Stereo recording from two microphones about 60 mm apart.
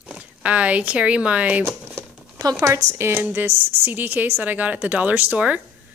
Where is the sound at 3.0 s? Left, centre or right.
Right.